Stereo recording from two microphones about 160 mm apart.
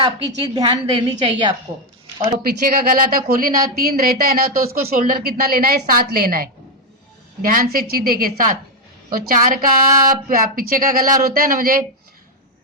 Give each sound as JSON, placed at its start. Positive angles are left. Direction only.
{"t": 0.0, "sound": "a woman's voice", "side_deg": -25}
{"t": 2.4, "sound": "speech", "side_deg": -65}